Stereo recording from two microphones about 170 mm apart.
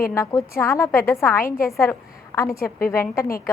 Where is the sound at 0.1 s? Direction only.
15° left (ahead or behind).